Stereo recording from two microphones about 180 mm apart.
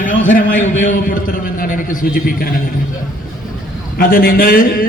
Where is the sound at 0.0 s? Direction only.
50° left (ahead or behind).